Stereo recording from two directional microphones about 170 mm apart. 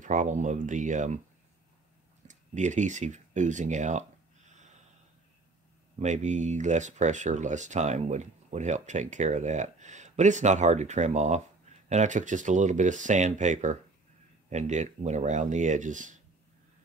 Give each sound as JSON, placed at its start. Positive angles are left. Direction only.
{"t": 0.0, "sound": "speech", "side_deg": -50}
{"t": 2.2, "sound": "speech", "side_deg": -45}
{"t": 4.5, "sound": "snort", "side_deg": -45}
{"t": 5.9, "sound": "speech", "side_deg": -45}